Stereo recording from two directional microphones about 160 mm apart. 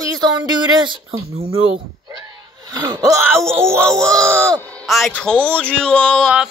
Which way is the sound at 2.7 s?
25° right (ahead or behind).